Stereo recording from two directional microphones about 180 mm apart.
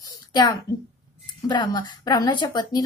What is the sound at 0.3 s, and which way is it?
A child's voice, 20° left (ahead or behind).